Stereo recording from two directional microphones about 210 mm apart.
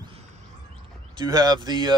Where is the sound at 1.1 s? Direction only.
20° right (ahead or behind).